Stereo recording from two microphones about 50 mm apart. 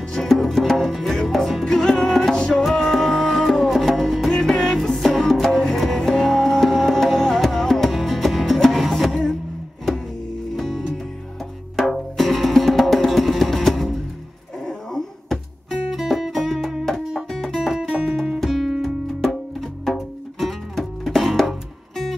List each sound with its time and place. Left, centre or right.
0.1 s music: centre
2.3 s music: centre
2.6 s music: centre
10.5 s music: centre